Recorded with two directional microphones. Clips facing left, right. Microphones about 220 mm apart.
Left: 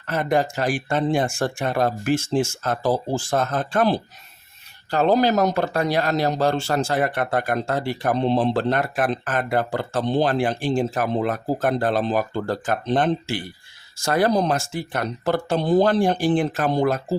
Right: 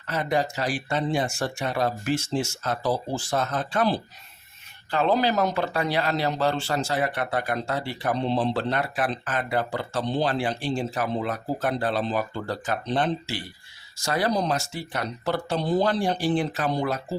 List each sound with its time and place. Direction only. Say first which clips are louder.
0.1 s speech: left 4 dB; 50° left (ahead or behind)